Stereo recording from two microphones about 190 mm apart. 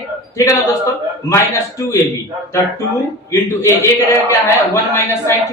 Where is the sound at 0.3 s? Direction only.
15° left (ahead or behind).